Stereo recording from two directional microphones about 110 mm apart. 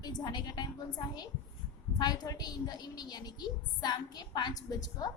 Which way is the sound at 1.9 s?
40° left (ahead or behind).